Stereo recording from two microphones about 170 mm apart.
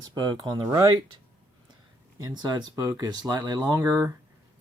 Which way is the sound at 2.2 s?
25° right (ahead or behind).